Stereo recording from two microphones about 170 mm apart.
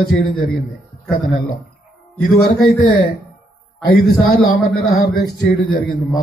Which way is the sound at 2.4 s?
70° left (ahead or behind).